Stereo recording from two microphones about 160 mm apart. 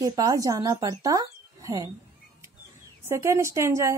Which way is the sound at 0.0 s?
25° right (ahead or behind).